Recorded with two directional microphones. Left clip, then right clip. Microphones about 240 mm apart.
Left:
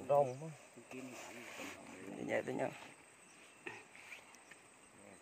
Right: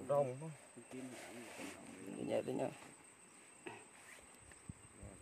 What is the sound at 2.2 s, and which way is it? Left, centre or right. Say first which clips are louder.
Speech: left 1 dB; centre.